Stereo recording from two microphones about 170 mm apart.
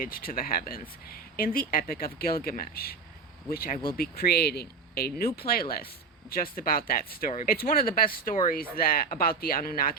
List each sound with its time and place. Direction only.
0.0 s speech: 60° left (ahead or behind)